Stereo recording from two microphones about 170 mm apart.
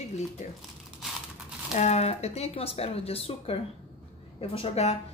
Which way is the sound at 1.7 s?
40° left (ahead or behind).